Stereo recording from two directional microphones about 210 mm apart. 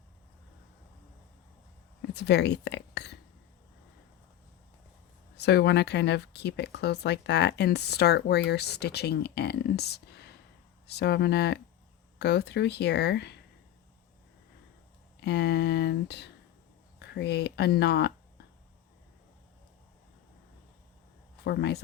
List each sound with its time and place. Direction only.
2.0 s speech: 50° left (ahead or behind)
5.4 s speech: 55° left (ahead or behind)
15.2 s speech: 55° left (ahead or behind)
21.4 s speech: 50° left (ahead or behind)